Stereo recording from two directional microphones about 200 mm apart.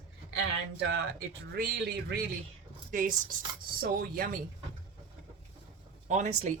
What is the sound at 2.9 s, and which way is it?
Speech, 40° right (ahead or behind).